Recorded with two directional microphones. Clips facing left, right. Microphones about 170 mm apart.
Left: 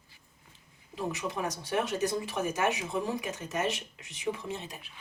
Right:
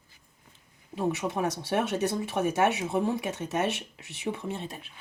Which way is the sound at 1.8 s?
65° right (ahead or behind).